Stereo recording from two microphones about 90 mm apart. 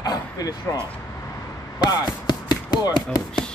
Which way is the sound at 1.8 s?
50° left (ahead or behind).